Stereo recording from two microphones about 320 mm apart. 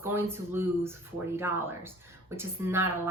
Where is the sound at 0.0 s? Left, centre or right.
Centre.